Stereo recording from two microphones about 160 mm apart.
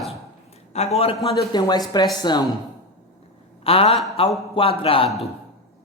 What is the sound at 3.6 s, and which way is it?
A man's voice, 35° left (ahead or behind).